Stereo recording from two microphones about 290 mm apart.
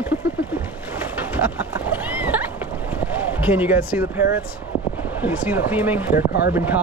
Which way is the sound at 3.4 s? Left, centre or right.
Centre.